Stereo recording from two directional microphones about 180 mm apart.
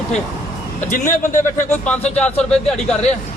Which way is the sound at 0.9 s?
45° left (ahead or behind).